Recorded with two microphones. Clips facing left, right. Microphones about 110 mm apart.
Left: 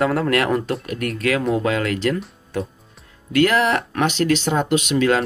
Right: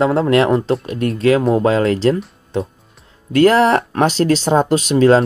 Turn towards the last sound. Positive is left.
turn(degrees=-35)  # may be behind; listen again after turning